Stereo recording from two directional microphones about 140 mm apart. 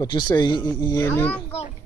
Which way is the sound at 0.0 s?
30° left (ahead or behind).